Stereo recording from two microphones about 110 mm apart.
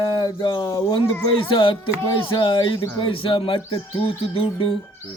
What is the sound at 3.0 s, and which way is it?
Bird, 55° left (ahead or behind).